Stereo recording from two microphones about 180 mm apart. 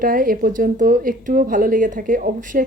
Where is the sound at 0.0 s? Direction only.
50° right (ahead or behind).